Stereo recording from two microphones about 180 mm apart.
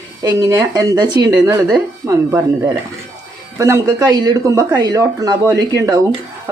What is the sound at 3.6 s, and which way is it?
Speech, 15° right (ahead or behind).